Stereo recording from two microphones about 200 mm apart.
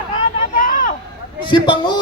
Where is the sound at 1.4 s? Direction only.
25° left (ahead or behind).